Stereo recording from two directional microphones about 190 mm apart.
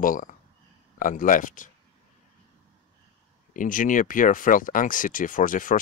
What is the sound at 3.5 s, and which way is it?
Speech, 45° left (ahead or behind).